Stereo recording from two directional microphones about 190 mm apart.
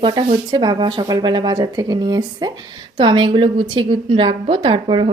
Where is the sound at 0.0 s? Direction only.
25° right (ahead or behind).